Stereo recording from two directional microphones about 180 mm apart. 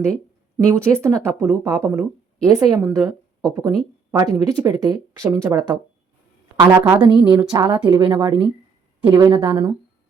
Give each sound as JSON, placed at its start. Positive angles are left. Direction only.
{"t": 0.5, "sound": "speech", "side_deg": -15}
{"t": 7.0, "sound": "a woman's voice", "side_deg": -25}